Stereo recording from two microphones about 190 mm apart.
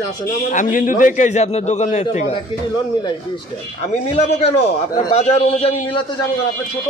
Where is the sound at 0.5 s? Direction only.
45° left (ahead or behind).